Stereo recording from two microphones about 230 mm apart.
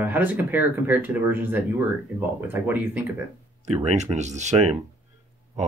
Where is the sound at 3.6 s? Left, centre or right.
Right.